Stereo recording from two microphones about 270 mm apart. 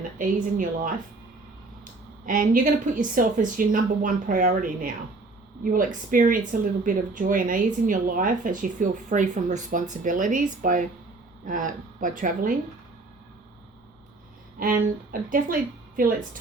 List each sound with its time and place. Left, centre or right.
0.2 s a woman's voice: right
2.2 s a woman's voice: right
14.6 s a woman's voice: right